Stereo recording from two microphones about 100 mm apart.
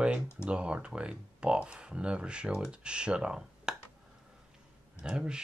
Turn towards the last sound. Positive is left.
turn(degrees=-10)  # may be behind; listen again after turning